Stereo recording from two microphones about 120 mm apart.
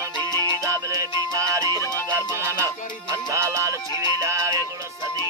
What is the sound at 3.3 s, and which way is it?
Music, 25° right (ahead or behind).